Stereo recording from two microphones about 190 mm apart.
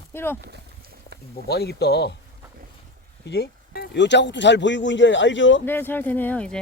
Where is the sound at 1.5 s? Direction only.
60° left (ahead or behind).